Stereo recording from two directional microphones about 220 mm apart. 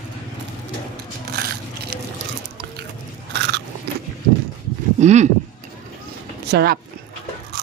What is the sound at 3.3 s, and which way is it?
Biting, 50° right (ahead or behind).